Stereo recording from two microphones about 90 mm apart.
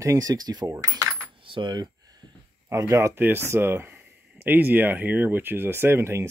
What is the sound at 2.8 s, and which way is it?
Speech, 35° right (ahead or behind).